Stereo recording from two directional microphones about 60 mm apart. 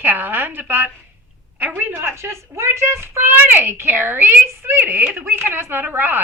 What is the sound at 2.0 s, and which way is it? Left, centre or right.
Speech, right.